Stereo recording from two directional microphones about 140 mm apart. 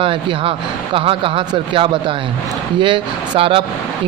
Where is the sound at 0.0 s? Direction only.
40° right (ahead or behind).